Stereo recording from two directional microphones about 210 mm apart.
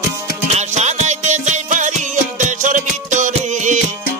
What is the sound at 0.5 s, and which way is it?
Music, 30° right (ahead or behind).